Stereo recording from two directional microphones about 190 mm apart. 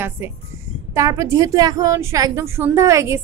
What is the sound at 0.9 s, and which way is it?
Speech, 15° right (ahead or behind).